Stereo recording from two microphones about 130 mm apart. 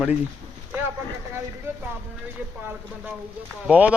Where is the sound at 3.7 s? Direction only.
10° right (ahead or behind).